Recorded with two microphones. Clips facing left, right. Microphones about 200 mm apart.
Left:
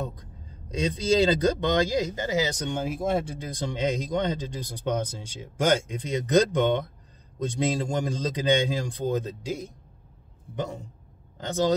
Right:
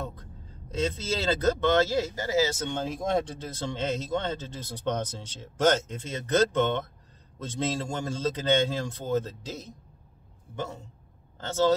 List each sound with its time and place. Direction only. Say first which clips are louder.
0.1 s speech: even; 15° left (ahead or behind)